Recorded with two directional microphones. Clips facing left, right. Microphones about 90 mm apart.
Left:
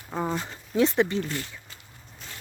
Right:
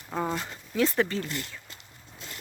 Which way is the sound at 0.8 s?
20° left (ahead or behind).